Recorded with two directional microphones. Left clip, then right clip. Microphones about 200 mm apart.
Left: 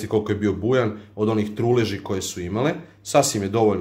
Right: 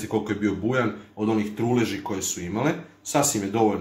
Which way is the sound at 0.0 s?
50° left (ahead or behind).